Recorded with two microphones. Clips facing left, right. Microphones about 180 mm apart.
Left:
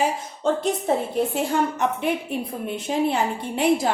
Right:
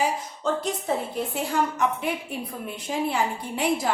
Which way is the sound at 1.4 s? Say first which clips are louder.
Right 1 dB; 25° left (ahead or behind).